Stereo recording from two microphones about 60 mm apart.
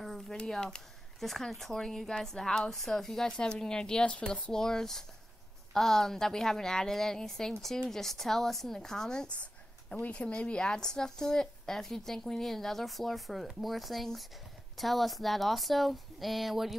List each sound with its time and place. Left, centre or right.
0.0 s a sound: centre
0.4 s a woman's voice: centre
9.3 s a woman's voice: centre